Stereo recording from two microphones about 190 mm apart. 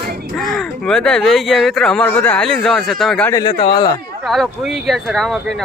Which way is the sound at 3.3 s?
25° left (ahead or behind).